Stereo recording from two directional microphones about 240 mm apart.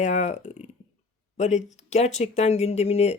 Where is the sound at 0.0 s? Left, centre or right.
Left.